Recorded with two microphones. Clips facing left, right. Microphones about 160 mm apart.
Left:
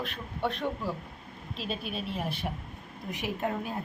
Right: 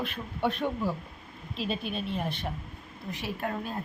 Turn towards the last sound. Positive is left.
turn(degrees=20)  # may be behind; listen again after turning